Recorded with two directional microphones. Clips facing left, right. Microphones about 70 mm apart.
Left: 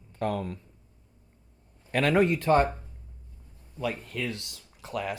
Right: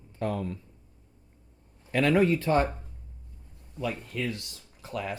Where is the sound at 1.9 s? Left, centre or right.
Left.